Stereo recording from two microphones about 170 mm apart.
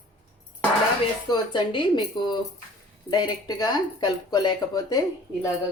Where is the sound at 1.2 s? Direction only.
25° left (ahead or behind).